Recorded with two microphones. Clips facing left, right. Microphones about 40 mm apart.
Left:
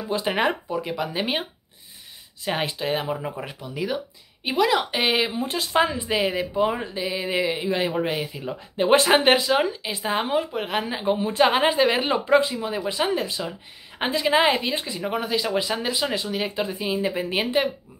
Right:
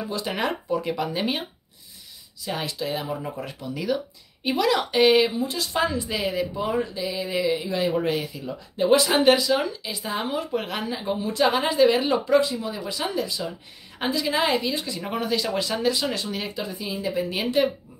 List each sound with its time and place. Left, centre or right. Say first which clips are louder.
0.1 s speech: left 6 dB; left
0.7 s speech: right 2 dB; centre
2.4 s speech: left 3 dB; left
3.1 s speech: left 2 dB; left
5.3 s speech: left 3 dB; left
8.0 s speech: even; left
8.4 s speech: even; left
15.0 s speech: left 2 dB; centre
16.2 s speech: left 3 dB; centre
16.4 s speech: left 4 dB; left